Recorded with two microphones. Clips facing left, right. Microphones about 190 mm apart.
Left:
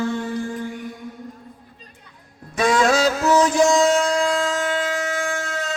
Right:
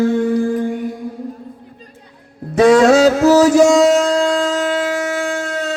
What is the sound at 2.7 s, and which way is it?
Music, 35° right (ahead or behind).